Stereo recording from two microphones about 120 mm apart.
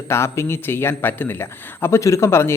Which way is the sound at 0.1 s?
20° left (ahead or behind).